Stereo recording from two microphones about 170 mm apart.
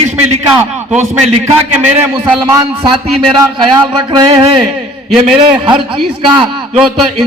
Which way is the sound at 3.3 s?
25° right (ahead or behind).